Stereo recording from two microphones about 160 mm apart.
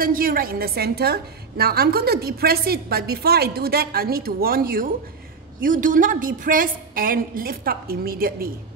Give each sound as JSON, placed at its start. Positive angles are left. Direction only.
{"t": 0.0, "sound": "a woman's voice", "side_deg": -65}